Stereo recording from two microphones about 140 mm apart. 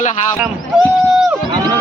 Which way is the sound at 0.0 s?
55° left (ahead or behind).